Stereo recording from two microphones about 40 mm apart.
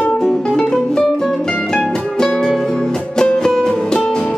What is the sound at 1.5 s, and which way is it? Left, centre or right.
Music, left.